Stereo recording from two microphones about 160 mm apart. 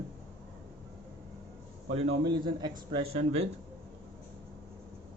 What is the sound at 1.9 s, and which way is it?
A man's voice, 35° right (ahead or behind).